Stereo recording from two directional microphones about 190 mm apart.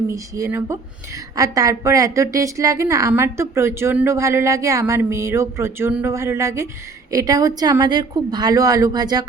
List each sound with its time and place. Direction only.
0.1 s a woman's voice: 15° right (ahead or behind)